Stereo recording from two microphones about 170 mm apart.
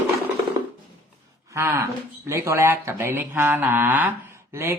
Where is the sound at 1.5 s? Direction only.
15° right (ahead or behind).